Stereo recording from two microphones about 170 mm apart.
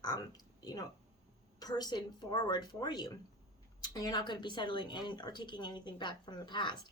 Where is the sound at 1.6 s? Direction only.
25° left (ahead or behind).